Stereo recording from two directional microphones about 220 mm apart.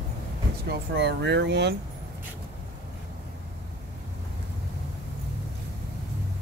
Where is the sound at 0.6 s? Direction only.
50° right (ahead or behind).